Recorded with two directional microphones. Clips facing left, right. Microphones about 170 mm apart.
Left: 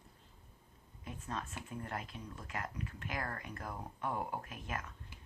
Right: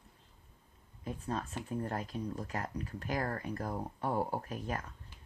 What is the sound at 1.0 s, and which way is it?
Speech, 35° right (ahead or behind).